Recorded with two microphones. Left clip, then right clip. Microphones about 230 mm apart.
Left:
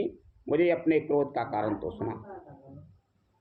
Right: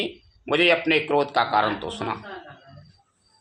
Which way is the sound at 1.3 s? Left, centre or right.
Right.